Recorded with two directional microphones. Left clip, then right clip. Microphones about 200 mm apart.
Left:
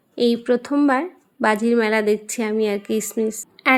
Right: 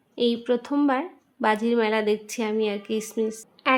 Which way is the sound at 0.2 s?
20° left (ahead or behind).